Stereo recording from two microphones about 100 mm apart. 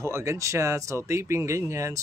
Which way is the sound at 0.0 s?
30° right (ahead or behind).